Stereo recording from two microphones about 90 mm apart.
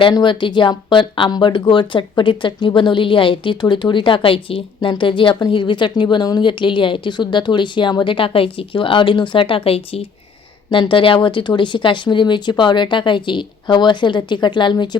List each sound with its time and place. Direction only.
0.1 s speech: 60° left (ahead or behind); by 10.0 s 90° left
10.7 s speech: 65° left (ahead or behind)